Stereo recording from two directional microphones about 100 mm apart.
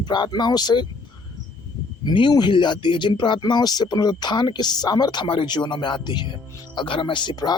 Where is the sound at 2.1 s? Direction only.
45° left (ahead or behind).